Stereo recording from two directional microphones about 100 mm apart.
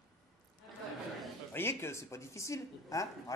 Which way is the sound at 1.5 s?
25° left (ahead or behind).